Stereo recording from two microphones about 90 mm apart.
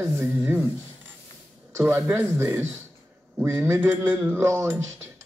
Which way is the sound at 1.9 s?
25° right (ahead or behind).